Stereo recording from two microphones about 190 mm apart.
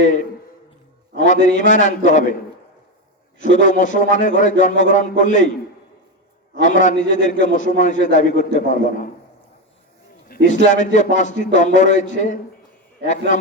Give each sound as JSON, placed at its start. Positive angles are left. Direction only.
{"t": 1.2, "sound": "a man's voice", "side_deg": 40}
{"t": 3.3, "sound": "a man's voice", "side_deg": 40}
{"t": 6.6, "sound": "a man's voice", "side_deg": 40}
{"t": 10.2, "sound": "a man's voice", "side_deg": 40}